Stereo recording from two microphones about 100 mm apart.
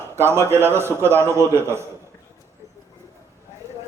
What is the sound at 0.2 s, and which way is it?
A man's voice, 25° right (ahead or behind).